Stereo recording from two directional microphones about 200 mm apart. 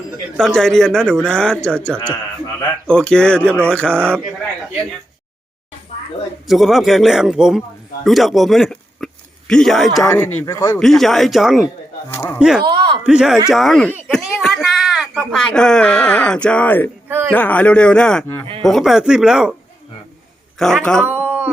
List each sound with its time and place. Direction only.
0.3 s a man's voice: 5° left (ahead or behind)
6.5 s a man's voice: centre (ahead or behind)
10.4 s speech: 15° left (ahead or behind)
10.8 s a man's voice: centre (ahead or behind)
12.1 s speech: 10° left (ahead or behind)
12.4 s a man's voice: 5° right (ahead or behind)
12.6 s speech: 25° right (ahead or behind)
13.1 s a man's voice: 5° right (ahead or behind)
17.1 s a man's voice: 10° right (ahead or behind)
17.3 s a man's voice: 10° left (ahead or behind)
20.6 s a man's voice: centre (ahead or behind)
21.1 s a sound: 10° right (ahead or behind)